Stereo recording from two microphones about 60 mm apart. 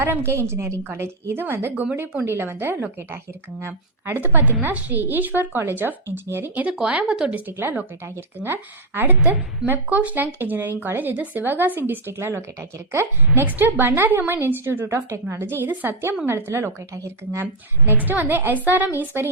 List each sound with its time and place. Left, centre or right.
0.3 s a woman's voice: right
1.7 s a woman's voice: right
2.2 s speech: right
6.7 s speech: centre
7.3 s speech: right
9.0 s speech: right
12.1 s a woman's voice: right
13.3 s a woman's voice: right
18.0 s a woman's voice: right